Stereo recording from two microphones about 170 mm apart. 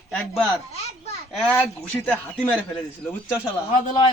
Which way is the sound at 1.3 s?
5° left (ahead or behind).